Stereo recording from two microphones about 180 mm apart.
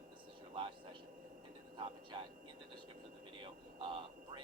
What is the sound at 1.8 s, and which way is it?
Speech, 25° right (ahead or behind).